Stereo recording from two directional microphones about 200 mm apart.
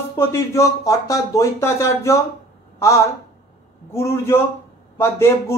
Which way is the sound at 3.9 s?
15° left (ahead or behind).